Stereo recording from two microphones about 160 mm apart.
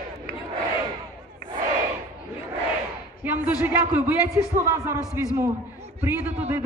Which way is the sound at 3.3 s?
10° right (ahead or behind).